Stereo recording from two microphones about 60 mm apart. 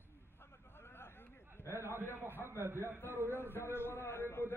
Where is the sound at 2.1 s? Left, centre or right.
Right.